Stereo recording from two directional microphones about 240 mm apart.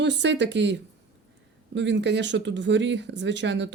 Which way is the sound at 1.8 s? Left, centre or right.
Right.